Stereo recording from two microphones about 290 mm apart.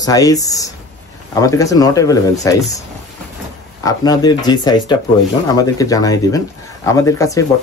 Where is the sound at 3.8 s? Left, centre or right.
Centre.